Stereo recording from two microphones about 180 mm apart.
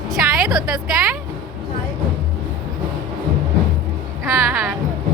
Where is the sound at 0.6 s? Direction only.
5° right (ahead or behind).